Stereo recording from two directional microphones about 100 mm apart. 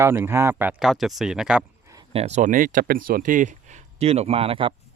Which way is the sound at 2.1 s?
80° right.